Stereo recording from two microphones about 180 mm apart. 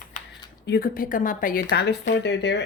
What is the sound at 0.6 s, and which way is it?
A woman's voice, 55° left (ahead or behind).